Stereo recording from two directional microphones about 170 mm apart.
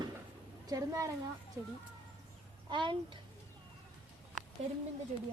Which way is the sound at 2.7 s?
30° right (ahead or behind).